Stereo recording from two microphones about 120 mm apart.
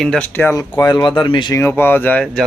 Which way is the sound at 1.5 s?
20° left (ahead or behind).